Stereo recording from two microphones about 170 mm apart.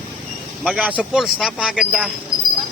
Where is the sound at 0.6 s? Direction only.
5° right (ahead or behind).